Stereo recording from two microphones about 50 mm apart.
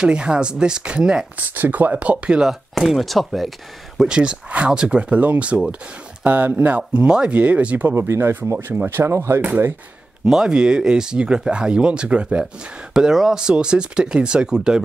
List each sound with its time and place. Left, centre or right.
0.0 s speech: centre
1.5 s speech: right
2.8 s speech: centre
4.0 s speech: centre
6.9 s speech: centre
8.1 s speech: right
10.2 s speech: centre
12.9 s speech: centre